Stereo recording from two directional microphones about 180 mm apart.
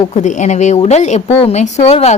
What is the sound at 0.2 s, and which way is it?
A woman's voice, 40° left (ahead or behind).